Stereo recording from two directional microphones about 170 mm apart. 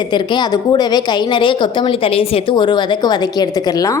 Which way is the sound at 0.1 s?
25° left (ahead or behind).